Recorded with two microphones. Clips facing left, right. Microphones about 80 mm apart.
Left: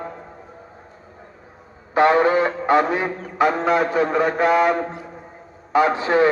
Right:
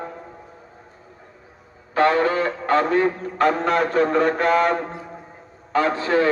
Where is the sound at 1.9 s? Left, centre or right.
Left.